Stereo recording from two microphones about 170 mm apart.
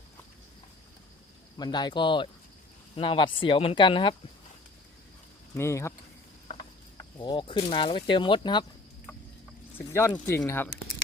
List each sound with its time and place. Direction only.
1.5 s speech: 25° left (ahead or behind)
5.5 s speech: 15° left (ahead or behind)
6.9 s speech: 25° left (ahead or behind)
9.7 s speech: 15° left (ahead or behind)